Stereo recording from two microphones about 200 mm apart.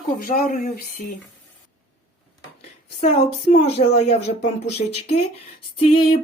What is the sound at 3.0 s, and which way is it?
A woman's voice, 35° left (ahead or behind).